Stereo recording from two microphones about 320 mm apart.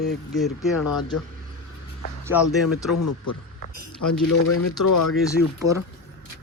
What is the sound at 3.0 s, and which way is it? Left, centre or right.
Speech, left.